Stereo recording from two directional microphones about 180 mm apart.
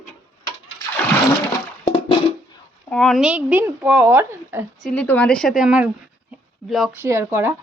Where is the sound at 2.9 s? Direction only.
5° left (ahead or behind); by 4.6 s 10° right (ahead or behind).